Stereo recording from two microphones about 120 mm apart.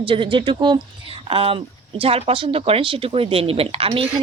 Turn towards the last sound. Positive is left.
turn(degrees=-50)  # may be behind; listen again after turning